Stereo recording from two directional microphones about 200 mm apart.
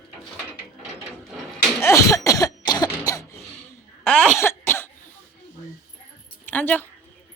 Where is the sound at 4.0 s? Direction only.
5° left (ahead or behind).